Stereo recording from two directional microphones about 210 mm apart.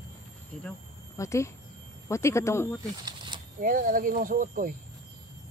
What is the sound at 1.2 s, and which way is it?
Speech, 15° left (ahead or behind).